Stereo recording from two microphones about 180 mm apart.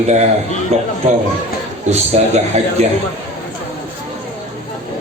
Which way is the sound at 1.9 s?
40° right (ahead or behind).